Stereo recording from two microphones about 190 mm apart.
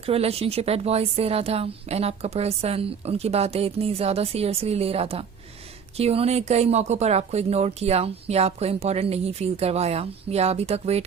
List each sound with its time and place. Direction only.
0.0 s speech: 30° right (ahead or behind)